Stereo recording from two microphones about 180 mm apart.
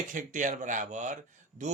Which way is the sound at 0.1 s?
45° right (ahead or behind).